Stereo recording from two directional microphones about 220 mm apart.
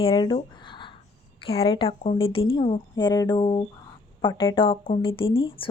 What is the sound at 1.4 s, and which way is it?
Speech, 25° left (ahead or behind).